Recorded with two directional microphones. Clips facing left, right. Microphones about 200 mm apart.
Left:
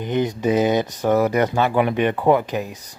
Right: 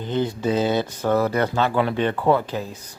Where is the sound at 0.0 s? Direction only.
15° left (ahead or behind).